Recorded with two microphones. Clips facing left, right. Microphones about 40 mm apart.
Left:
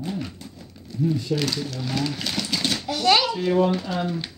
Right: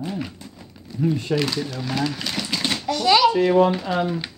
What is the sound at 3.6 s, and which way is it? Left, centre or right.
Speech, centre.